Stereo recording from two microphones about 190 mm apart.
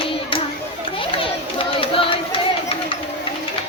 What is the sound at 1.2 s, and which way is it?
Chatter, 30° left (ahead or behind).